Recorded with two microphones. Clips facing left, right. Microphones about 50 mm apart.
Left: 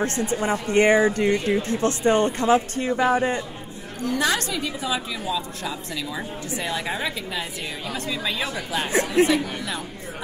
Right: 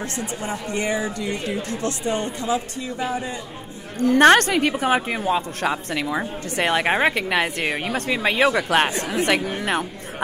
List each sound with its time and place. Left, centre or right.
0.3 s speech: left
1.5 s speech: left
4.0 s a woman's voice: right
9.2 s speech: right